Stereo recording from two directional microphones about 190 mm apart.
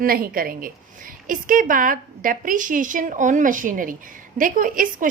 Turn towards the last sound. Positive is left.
turn(degrees=-45)  # may be behind; listen again after turning